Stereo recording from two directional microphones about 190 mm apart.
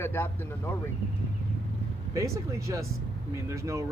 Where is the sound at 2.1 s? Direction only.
15° right (ahead or behind).